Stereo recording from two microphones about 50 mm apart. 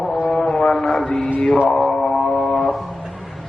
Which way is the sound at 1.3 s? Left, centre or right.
Left.